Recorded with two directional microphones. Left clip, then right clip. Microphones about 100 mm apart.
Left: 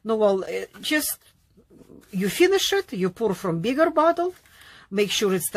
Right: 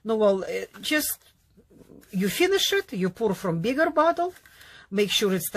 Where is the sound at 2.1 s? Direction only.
20° left (ahead or behind).